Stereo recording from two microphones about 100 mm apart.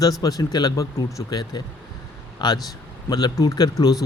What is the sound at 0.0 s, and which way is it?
Speech, 40° left (ahead or behind).